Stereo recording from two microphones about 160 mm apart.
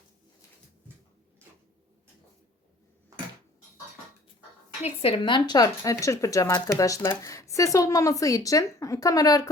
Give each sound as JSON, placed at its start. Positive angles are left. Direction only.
{"t": 4.8, "sound": "speech", "side_deg": 35}